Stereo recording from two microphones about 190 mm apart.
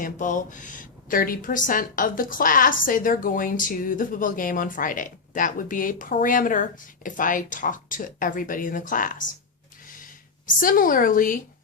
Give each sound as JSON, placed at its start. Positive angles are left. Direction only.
{"t": 0.0, "sound": "speech", "side_deg": 45}